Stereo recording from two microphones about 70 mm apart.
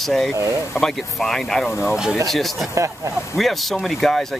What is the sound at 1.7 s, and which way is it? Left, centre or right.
Speech, left.